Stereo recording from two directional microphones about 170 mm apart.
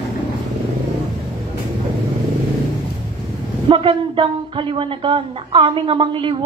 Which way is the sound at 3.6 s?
30° right (ahead or behind).